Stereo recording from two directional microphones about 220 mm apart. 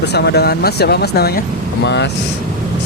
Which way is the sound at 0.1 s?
50° left (ahead or behind).